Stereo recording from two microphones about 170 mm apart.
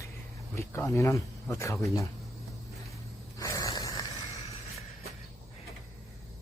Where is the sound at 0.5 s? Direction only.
15° left (ahead or behind).